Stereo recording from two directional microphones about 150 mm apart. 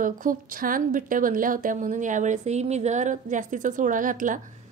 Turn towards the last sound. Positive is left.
turn(degrees=-60)  # may be behind; listen again after turning